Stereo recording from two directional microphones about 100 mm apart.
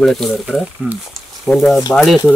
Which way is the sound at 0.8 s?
15° right (ahead or behind).